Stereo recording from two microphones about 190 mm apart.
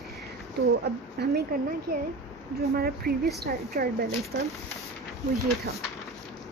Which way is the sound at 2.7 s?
55° right (ahead or behind).